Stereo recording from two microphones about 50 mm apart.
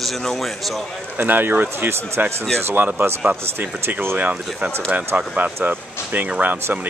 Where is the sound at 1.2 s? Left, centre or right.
Right.